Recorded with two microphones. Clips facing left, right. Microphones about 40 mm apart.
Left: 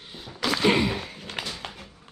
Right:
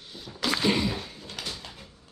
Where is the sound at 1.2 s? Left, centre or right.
Left.